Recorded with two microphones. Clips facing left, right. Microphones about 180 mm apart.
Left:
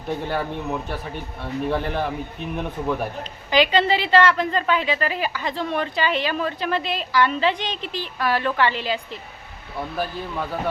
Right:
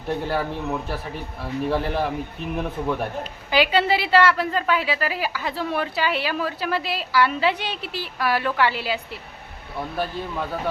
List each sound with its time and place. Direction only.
0.1 s a man's voice: centre (ahead or behind)